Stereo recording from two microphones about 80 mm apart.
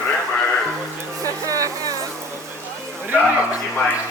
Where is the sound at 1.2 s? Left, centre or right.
Right.